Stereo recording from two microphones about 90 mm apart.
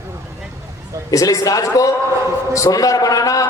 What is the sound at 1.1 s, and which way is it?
A man's voice, 40° left (ahead or behind).